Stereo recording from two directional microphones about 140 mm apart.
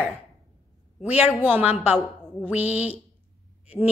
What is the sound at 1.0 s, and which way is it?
Speech, 15° right (ahead or behind).